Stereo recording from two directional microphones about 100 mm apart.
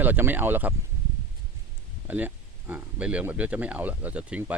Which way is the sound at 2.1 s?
15° right (ahead or behind).